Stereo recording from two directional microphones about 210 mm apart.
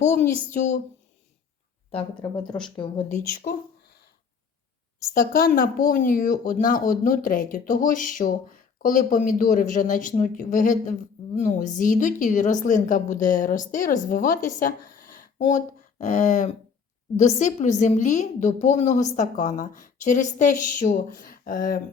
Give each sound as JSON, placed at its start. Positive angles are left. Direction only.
{"t": 0.0, "sound": "speech", "side_deg": 35}
{"t": 2.0, "sound": "a woman's voice", "side_deg": 5}
{"t": 2.7, "sound": "speech", "side_deg": 25}
{"t": 3.2, "sound": "speech", "side_deg": 40}
{"t": 5.1, "sound": "a woman's voice", "side_deg": 45}